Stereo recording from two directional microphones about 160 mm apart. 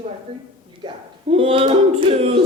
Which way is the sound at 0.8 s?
30° right (ahead or behind).